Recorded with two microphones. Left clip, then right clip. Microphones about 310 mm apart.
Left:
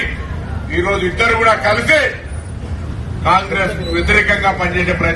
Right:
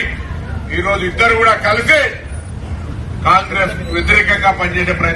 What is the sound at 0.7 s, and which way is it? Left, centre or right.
Speech, centre.